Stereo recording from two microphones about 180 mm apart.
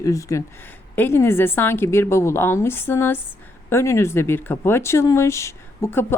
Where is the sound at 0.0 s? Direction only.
15° left (ahead or behind).